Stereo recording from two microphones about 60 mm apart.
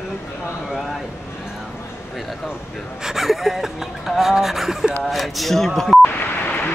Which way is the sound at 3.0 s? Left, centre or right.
Centre.